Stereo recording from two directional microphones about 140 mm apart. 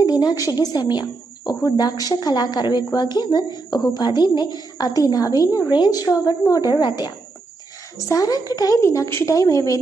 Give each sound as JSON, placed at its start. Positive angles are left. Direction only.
{"t": 0.0, "sound": "a woman's voice", "side_deg": 30}